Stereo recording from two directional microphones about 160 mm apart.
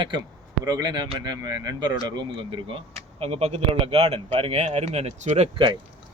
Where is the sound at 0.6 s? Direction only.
25° right (ahead or behind); by 5.5 s 45° right (ahead or behind).